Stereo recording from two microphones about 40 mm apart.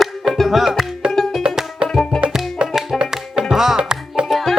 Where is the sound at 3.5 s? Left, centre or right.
Centre.